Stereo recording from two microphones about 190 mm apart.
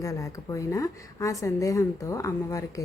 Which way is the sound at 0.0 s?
15° left (ahead or behind).